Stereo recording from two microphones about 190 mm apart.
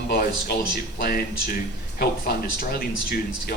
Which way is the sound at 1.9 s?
55° left (ahead or behind).